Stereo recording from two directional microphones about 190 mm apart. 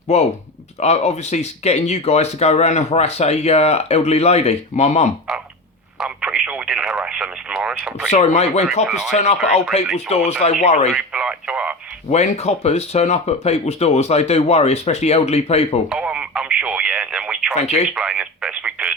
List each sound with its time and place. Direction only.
0.1 s speech: 35° left (ahead or behind)
6.0 s radio: 5° right (ahead or behind)
8.1 s speech: 35° left (ahead or behind)
8.9 s speech: centre (ahead or behind)
9.1 s speech: 35° left (ahead or behind)
10.9 s radio: 5° right (ahead or behind)
12.1 s speech: 35° left (ahead or behind)
15.9 s radio: 5° right (ahead or behind)